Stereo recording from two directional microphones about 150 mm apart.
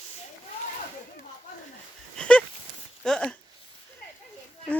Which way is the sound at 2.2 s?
10° left (ahead or behind).